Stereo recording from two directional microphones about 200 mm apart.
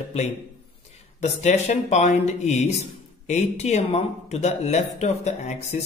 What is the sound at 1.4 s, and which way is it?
Speech, 35° left (ahead or behind).